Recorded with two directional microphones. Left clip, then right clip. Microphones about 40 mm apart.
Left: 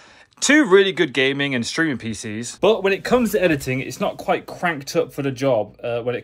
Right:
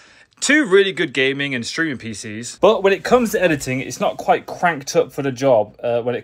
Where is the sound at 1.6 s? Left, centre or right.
Centre.